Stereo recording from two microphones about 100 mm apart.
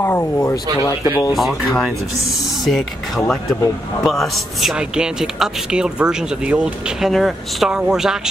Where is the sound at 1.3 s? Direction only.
Centre (ahead or behind).